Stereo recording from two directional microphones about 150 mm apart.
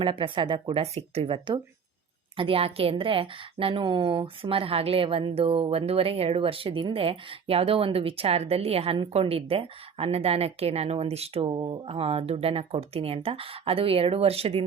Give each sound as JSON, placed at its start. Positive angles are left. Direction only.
{"t": 0.0, "sound": "a woman's voice", "side_deg": -35}